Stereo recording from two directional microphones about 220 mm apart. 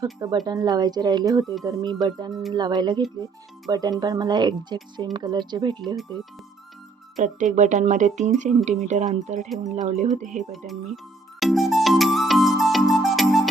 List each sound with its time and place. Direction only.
0.0 s speech: 15° right (ahead or behind)
7.2 s speech: 35° right (ahead or behind)
10.5 s music: centre (ahead or behind)